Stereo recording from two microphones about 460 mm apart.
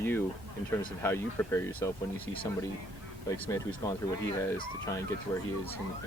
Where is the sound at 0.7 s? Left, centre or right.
Centre.